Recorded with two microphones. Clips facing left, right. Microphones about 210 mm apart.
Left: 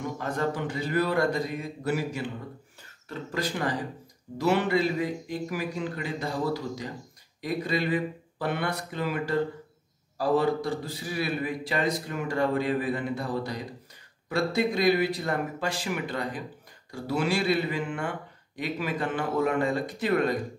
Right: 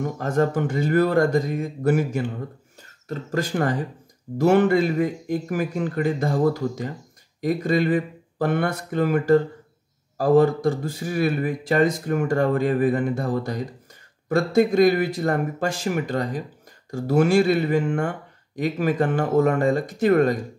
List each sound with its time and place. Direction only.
0.0 s speech: 45° right (ahead or behind)